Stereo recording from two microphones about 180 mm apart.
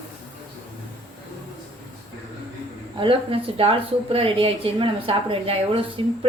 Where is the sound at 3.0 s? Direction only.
30° right (ahead or behind).